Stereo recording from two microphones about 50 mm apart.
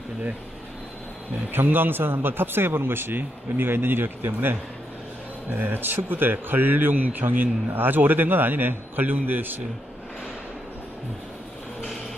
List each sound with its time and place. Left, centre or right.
1.5 s speech: right
5.6 s speech: right